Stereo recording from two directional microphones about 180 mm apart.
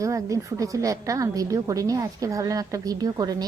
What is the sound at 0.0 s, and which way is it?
A woman's voice, 15° right (ahead or behind).